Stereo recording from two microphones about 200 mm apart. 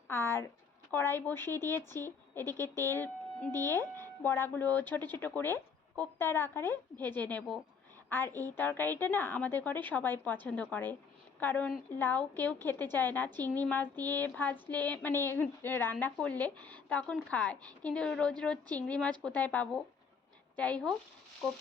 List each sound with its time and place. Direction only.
0.1 s speech: 10° left (ahead or behind)
2.4 s speech: 15° right (ahead or behind)
2.8 s speech: 10° left (ahead or behind)